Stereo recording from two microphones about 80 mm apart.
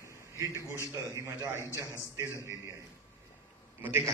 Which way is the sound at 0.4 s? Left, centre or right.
Right.